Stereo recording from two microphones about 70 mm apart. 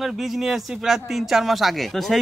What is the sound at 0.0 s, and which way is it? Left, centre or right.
A man's voice, centre.